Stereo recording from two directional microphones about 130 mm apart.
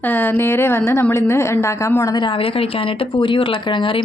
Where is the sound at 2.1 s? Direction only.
40° left (ahead or behind).